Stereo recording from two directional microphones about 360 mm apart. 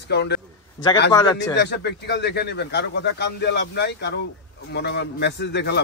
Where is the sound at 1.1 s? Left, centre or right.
Centre.